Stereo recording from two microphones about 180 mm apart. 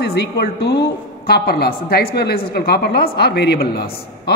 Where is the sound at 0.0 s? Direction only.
60° left (ahead or behind).